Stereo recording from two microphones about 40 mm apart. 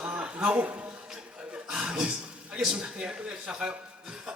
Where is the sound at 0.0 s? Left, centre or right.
Right.